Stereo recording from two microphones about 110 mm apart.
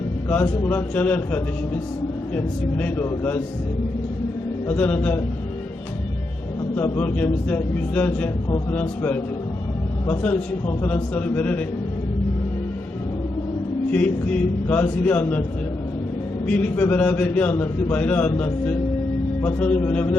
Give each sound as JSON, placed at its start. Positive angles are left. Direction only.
{"t": 0.4, "sound": "a man's voice", "side_deg": 25}
{"t": 4.7, "sound": "a man's voice", "side_deg": 15}
{"t": 6.7, "sound": "a man's voice", "side_deg": 20}
{"t": 13.9, "sound": "a man's voice", "side_deg": 10}
{"t": 16.5, "sound": "a man's voice", "side_deg": 15}